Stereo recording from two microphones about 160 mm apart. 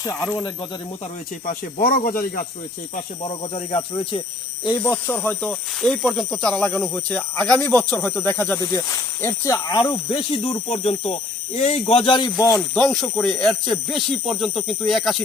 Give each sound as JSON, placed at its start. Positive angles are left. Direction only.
{"t": 0.0, "sound": "speech", "side_deg": 15}
{"t": 1.5, "sound": "speech", "side_deg": 60}
{"t": 3.2, "sound": "speech", "side_deg": 35}
{"t": 4.8, "sound": "speech", "side_deg": 10}
{"t": 10.1, "sound": "speech", "side_deg": 35}
{"t": 12.5, "sound": "speech", "side_deg": 5}